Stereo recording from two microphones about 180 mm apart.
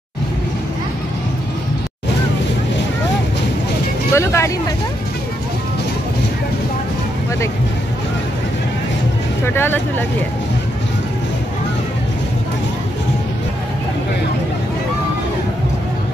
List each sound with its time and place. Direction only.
4.1 s vehicle: 15° left (ahead or behind)
9.5 s vehicle: 10° left (ahead or behind)